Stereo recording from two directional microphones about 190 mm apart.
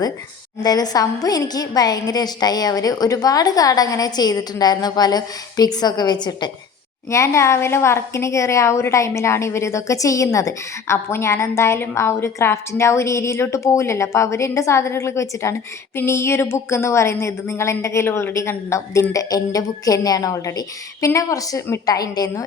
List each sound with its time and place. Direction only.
0.6 s a woman's voice: 20° left (ahead or behind)